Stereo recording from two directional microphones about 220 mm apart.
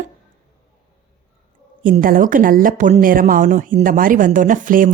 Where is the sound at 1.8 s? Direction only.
40° right (ahead or behind).